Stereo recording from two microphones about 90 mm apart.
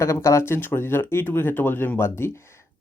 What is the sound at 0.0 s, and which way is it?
Speech, 35° left (ahead or behind).